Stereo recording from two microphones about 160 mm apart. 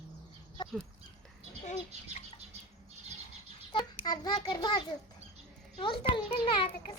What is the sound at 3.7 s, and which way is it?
Child singing, 30° left (ahead or behind).